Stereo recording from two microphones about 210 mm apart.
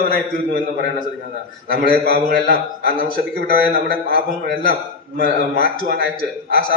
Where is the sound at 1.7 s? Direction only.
45° right (ahead or behind).